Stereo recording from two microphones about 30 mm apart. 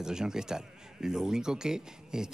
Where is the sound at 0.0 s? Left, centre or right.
Right.